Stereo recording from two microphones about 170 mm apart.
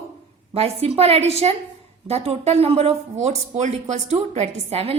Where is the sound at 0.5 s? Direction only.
35° right (ahead or behind).